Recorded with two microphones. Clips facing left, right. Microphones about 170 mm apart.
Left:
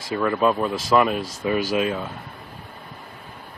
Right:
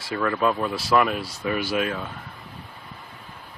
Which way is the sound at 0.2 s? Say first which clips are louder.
Left 3 dB; 15° left (ahead or behind).